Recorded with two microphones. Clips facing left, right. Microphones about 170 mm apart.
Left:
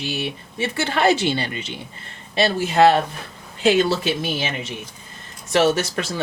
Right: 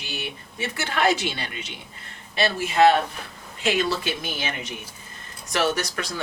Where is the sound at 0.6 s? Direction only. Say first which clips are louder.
Left 4 dB; 30° left (ahead or behind).